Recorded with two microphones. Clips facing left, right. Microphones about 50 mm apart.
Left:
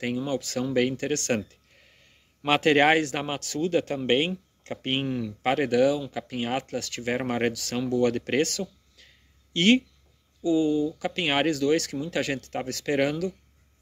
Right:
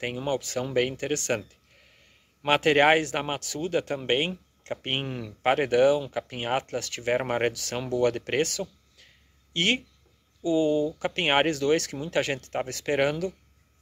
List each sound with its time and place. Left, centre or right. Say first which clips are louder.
0.0 s speech: left 1 dB; right
0.7 s speech: left 1 dB; centre
2.4 s speech: even; centre
10.4 s speech: even; right